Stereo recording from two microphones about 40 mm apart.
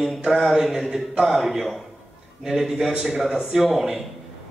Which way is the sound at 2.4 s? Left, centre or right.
Centre.